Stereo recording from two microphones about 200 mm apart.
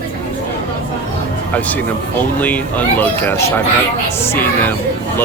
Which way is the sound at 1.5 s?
10° left (ahead or behind).